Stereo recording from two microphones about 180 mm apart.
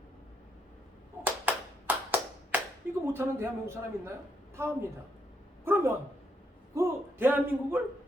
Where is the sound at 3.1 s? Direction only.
15° right (ahead or behind).